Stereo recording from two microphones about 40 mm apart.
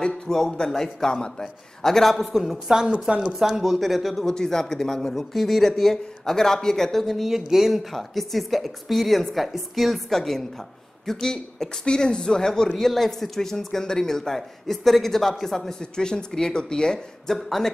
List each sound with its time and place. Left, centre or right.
0.0 s speech: centre
2.7 s a woman's voice: right
3.3 s speech: centre
7.2 s speech: centre
7.9 s a woman's voice: centre
15.8 s speech: centre